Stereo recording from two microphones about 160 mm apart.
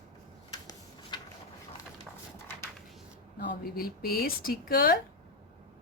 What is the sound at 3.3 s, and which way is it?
Speech, 65° left (ahead or behind).